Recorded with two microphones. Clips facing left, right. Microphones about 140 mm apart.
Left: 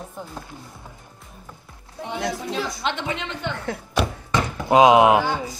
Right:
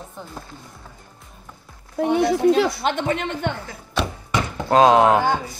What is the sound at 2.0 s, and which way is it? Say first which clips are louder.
Speech: right 10 dB; 65° right (ahead or behind).